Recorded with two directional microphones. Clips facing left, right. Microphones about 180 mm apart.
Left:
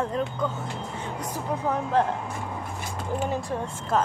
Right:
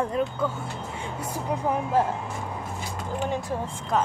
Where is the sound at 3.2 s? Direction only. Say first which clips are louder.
Right 2 dB; 5° left (ahead or behind).